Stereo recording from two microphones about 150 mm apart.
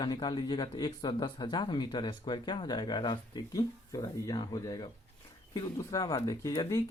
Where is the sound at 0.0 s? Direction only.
30° left (ahead or behind).